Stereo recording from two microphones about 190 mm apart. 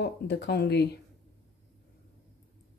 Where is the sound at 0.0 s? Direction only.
60° left (ahead or behind).